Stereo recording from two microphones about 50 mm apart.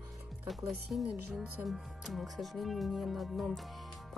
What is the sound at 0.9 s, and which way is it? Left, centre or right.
Speech, centre.